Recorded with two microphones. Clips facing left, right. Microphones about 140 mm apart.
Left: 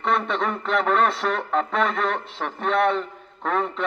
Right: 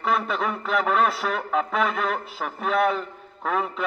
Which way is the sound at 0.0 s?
5° right (ahead or behind).